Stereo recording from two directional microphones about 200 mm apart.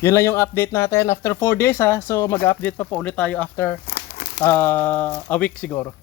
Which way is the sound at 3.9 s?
50° left (ahead or behind).